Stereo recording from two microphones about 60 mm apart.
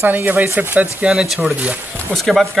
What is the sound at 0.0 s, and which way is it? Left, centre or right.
Speech, right.